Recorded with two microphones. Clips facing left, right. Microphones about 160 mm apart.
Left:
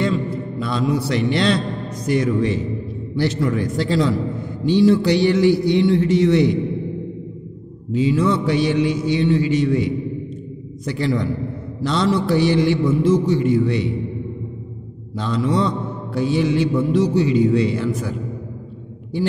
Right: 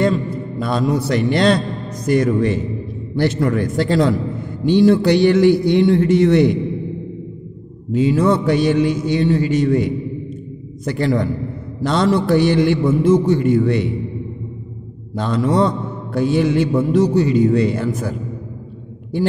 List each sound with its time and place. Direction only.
0.0 s a man's voice: 45° right (ahead or behind)
7.9 s a man's voice: 50° right (ahead or behind)
15.1 s a man's voice: 50° right (ahead or behind)